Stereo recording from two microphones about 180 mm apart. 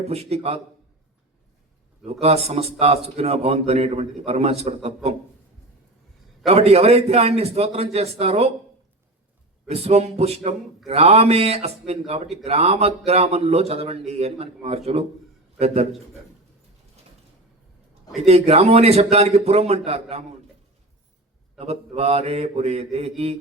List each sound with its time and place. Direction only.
0.0 s speech: 35° right (ahead or behind)
2.2 s speech: 35° right (ahead or behind)
6.4 s speech: 35° right (ahead or behind)
9.6 s speech: 35° right (ahead or behind)
18.3 s speech: 35° right (ahead or behind)
21.6 s speech: 35° right (ahead or behind)